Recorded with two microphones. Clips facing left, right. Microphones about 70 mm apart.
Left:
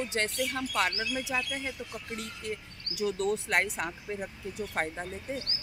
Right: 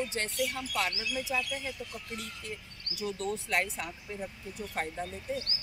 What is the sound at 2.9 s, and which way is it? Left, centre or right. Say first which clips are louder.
Speech: left 5 dB; left.